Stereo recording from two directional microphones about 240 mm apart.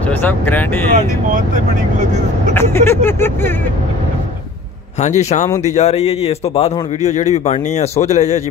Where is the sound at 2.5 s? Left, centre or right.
Centre.